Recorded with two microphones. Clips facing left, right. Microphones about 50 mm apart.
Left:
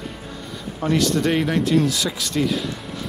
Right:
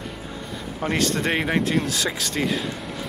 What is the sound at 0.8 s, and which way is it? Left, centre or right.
Speech, right.